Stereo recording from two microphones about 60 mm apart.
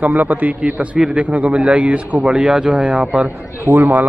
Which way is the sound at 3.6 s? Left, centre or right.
Right.